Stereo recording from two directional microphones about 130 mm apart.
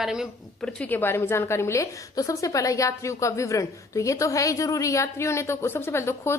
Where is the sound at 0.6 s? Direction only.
10° left (ahead or behind).